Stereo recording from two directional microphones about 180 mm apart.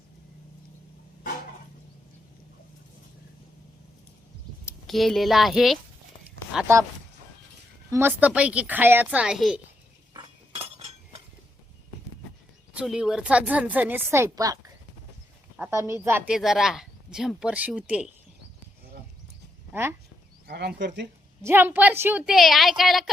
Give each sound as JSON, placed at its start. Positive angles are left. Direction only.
{"t": 4.9, "sound": "a woman's voice", "side_deg": 0}
{"t": 7.9, "sound": "a woman's voice", "side_deg": -15}
{"t": 10.2, "sound": "chink", "side_deg": -35}
{"t": 12.7, "sound": "a woman's voice", "side_deg": -5}
{"t": 19.7, "sound": "a woman's voice", "side_deg": -15}
{"t": 20.5, "sound": "speech", "side_deg": -65}
{"t": 21.4, "sound": "a woman's voice", "side_deg": -10}